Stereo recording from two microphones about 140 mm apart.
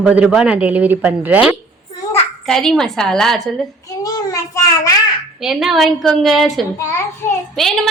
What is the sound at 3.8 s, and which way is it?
Child singing, 25° left (ahead or behind).